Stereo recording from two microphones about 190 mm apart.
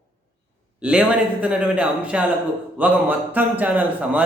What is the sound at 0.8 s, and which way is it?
A man's voice, 5° right (ahead or behind).